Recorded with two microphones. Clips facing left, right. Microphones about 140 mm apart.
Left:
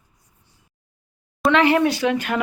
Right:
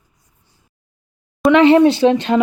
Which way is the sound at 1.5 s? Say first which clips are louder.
Right 7 dB; 20° right (ahead or behind).